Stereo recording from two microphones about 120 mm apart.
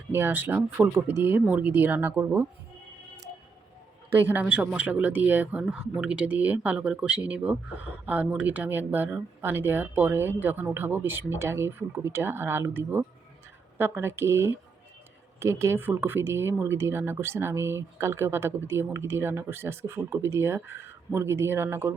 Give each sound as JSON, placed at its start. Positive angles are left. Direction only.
{"t": 0.1, "sound": "speech", "side_deg": -20}
{"t": 4.1, "sound": "speech", "side_deg": -15}